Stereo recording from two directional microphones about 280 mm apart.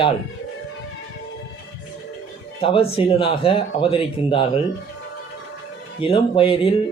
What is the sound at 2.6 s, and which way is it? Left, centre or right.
Speech, centre.